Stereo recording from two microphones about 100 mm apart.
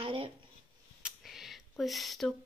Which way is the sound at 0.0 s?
65° right (ahead or behind).